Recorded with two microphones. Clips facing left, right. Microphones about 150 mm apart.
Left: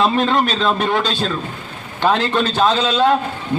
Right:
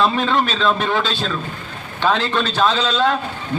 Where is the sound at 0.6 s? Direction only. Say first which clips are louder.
Left 1 dB; 10° left (ahead or behind).